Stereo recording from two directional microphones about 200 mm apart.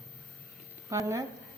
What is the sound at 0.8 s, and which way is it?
Speech, 15° right (ahead or behind).